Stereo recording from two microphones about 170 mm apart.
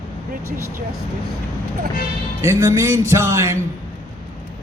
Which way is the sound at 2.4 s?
15° right (ahead or behind).